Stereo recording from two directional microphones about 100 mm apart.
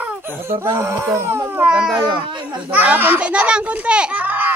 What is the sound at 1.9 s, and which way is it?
Speech, 55° right (ahead or behind).